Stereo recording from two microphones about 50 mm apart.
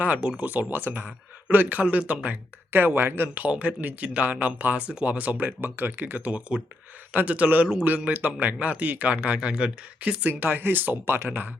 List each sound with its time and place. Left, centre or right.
0.2 s speech: right
0.7 s speech: right
2.7 s speech: right
3.3 s speech: right
6.2 s speech: right
10.2 s speech: right